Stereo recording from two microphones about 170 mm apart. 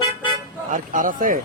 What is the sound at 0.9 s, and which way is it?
Speech, 55° right (ahead or behind).